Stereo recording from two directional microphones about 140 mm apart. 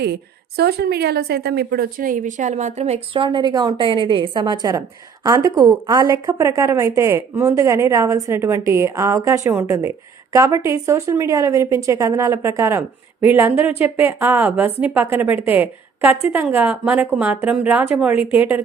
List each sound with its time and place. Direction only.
1.7 s a woman's voice: 90° right; by 18.6 s 10° right (ahead or behind)